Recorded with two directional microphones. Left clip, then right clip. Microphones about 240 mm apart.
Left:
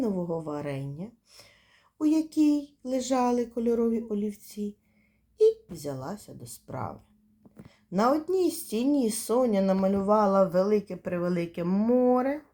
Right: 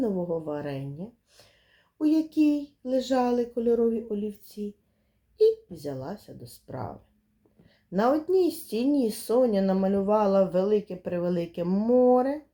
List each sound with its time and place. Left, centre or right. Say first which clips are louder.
0.0 s speech: right 2 dB; left
5.7 s speech: right 1 dB; left
11.1 s a sound: right 1 dB; centre